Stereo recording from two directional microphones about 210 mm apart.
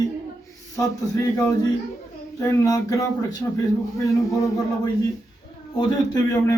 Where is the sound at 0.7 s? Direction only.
15° left (ahead or behind).